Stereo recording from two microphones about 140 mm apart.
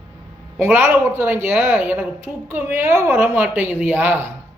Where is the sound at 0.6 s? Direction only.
15° right (ahead or behind).